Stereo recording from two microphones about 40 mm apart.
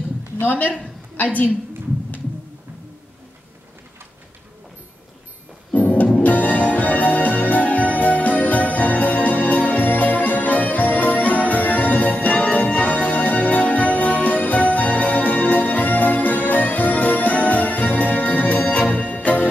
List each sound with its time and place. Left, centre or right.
0.4 s a woman's voice: left
5.7 s music: left